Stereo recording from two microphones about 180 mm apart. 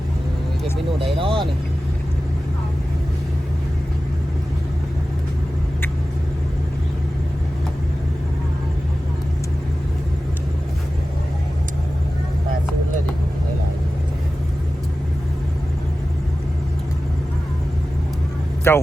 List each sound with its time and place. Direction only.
1.2 s vehicle: 30° right (ahead or behind)
18.7 s speech: 15° left (ahead or behind)